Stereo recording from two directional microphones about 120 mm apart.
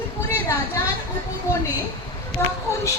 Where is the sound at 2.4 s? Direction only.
20° left (ahead or behind).